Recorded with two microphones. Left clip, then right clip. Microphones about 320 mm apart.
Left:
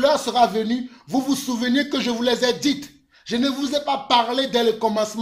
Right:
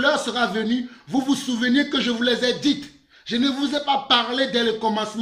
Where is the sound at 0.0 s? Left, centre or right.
Centre.